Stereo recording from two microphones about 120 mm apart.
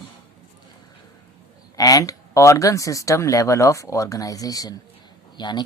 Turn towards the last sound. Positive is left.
turn(degrees=40)  # may be behind; listen again after turning